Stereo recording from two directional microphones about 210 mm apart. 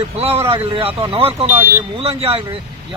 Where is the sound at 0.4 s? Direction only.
25° right (ahead or behind).